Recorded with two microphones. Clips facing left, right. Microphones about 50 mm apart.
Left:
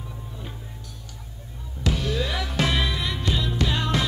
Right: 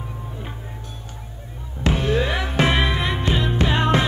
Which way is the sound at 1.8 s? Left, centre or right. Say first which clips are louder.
Right 6 dB; right.